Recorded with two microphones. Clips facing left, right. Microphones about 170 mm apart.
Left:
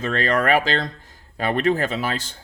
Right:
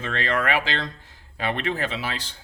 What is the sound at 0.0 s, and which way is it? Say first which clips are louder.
Speech: left 4 dB; 40° left (ahead or behind).